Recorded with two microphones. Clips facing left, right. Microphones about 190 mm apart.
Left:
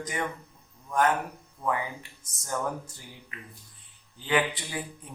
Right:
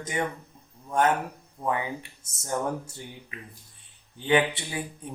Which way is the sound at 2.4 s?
25° right (ahead or behind).